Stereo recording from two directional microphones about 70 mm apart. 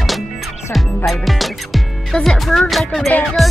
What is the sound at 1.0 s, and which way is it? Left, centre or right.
Speech, centre.